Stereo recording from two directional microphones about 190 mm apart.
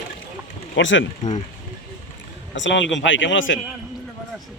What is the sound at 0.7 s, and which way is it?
Speech, 75° left (ahead or behind).